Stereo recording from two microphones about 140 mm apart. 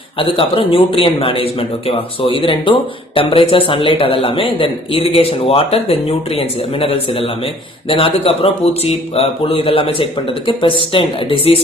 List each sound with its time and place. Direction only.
0.2 s speech: 40° left (ahead or behind)